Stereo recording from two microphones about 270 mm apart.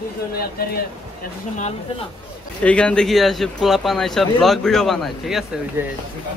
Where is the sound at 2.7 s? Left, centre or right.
Centre.